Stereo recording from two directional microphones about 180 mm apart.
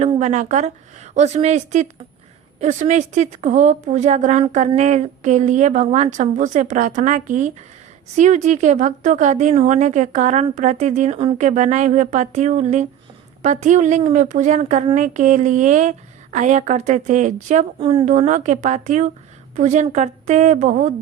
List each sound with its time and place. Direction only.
0.0 s a woman's voice: 40° right (ahead or behind)
17.7 s speech: 30° right (ahead or behind)
18.0 s a woman's voice: 45° right (ahead or behind)